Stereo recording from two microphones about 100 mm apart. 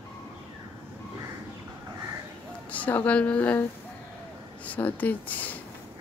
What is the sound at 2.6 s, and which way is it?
A woman's voice, 15° left (ahead or behind).